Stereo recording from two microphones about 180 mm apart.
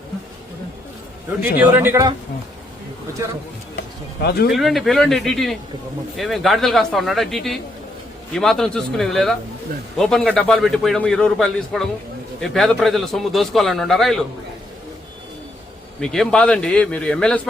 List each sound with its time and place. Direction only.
1.4 s a man's voice: 10° right (ahead or behind)
3.8 s speech: 60° left (ahead or behind)
4.5 s a man's voice: centre (ahead or behind)
16.0 s a man's voice: 5° left (ahead or behind)